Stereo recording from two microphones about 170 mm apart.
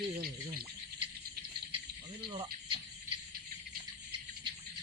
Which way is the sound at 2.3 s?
30° right (ahead or behind).